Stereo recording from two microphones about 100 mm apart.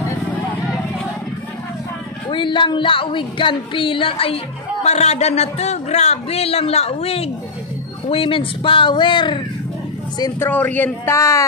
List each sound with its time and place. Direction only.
2.2 s speech: 55° left (ahead or behind)
4.8 s speech: 90° left
8.1 s speech: 65° left (ahead or behind)
10.4 s speech: 15° left (ahead or behind)
11.1 s speech: 30° left (ahead or behind)